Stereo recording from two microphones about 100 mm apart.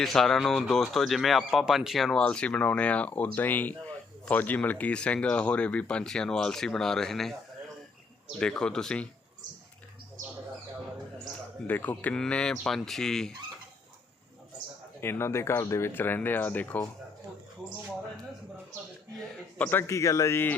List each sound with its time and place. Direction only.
0.0 s speech: 5° left (ahead or behind)
2.2 s speech: 10° left (ahead or behind)
8.4 s speech: 10° left (ahead or behind)
11.7 s speech: 15° left (ahead or behind)
15.0 s speech: 25° left (ahead or behind)
19.5 s a man's voice: 15° left (ahead or behind)
19.9 s speech: 30° left (ahead or behind)